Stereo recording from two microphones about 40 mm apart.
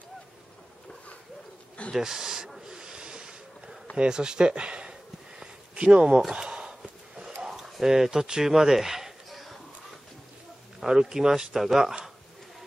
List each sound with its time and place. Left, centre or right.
2.0 s speech: centre
2.7 s snort: centre
3.9 s speech: right
5.4 s a sound: right
7.8 s speech: centre
10.9 s speech: centre